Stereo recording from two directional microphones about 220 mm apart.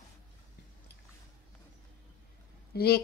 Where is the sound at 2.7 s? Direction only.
45° left (ahead or behind).